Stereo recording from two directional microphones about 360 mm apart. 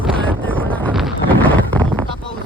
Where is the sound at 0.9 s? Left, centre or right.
Centre.